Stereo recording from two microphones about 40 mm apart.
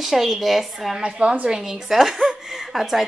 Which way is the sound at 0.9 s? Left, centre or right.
Right.